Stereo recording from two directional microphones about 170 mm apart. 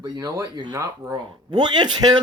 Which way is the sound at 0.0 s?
20° right (ahead or behind).